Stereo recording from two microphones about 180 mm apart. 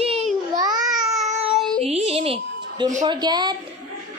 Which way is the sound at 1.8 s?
35° right (ahead or behind).